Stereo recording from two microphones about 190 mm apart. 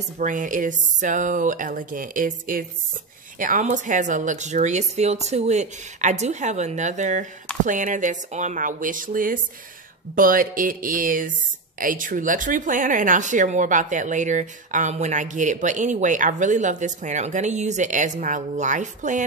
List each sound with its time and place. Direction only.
0.2 s speech: 45° right (ahead or behind)